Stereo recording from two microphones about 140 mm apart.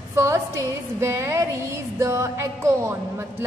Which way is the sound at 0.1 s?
20° right (ahead or behind).